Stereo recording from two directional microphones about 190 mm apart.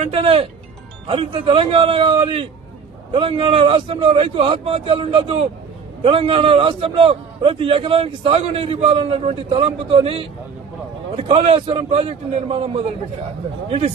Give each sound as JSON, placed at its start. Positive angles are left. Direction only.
{"t": 0.0, "sound": "a man's voice", "side_deg": -30}